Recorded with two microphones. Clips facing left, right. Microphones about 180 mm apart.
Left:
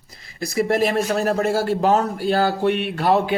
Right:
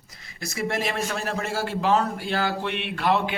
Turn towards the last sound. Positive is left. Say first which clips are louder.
# left 5 dB
turn(degrees=40)  # may be behind; listen again after turning